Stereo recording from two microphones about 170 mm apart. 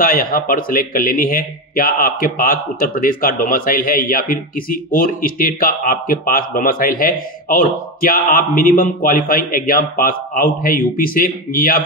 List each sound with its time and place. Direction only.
0.0 s a man's voice: 55° left (ahead or behind)